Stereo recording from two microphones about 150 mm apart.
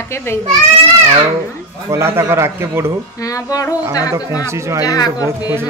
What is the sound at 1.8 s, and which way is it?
Speech, 20° right (ahead or behind).